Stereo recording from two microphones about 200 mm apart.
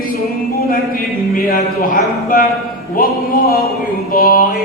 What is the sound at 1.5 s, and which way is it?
A man's voice, 45° left (ahead or behind).